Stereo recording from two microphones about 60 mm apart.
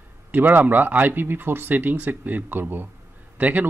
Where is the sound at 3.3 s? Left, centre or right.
Right.